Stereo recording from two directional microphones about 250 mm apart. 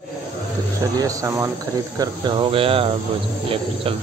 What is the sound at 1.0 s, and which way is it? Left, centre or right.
Speech, centre.